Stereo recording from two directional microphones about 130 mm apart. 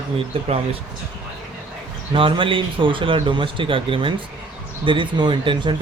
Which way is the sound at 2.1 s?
40° right (ahead or behind).